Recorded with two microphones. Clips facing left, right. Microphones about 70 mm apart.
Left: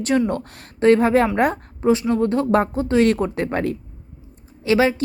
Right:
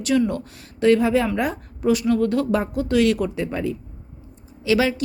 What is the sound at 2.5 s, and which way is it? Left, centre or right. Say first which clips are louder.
Speech: left 4 dB; left.